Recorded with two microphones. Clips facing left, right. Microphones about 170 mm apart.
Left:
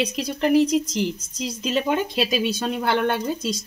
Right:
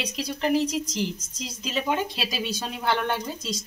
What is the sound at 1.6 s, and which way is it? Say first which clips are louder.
Speech: left 4 dB; 60° left (ahead or behind).